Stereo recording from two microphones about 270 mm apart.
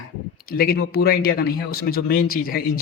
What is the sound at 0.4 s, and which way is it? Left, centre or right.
Speech, left.